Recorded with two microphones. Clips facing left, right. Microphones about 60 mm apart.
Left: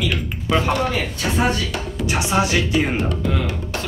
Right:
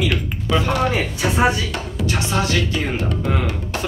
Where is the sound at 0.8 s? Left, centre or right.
Centre.